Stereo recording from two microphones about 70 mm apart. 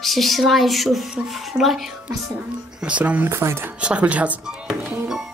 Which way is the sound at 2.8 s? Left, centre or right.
Centre.